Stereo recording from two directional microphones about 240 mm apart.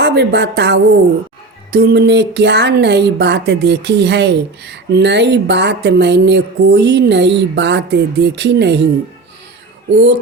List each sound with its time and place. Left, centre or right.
0.0 s speech: right
9.9 s speech: right